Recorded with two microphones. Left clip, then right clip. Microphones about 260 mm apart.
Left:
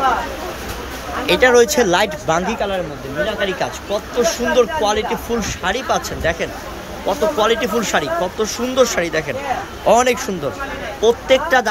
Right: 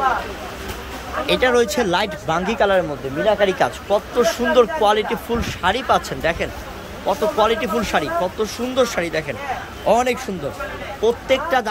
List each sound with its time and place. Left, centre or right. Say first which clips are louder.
1.2 s speech: left 5 dB; centre